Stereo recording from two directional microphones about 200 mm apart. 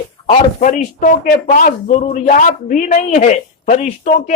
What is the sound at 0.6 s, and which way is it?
Speech, 40° left (ahead or behind).